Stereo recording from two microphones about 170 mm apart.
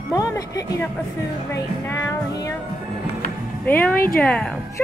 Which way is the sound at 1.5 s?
15° left (ahead or behind).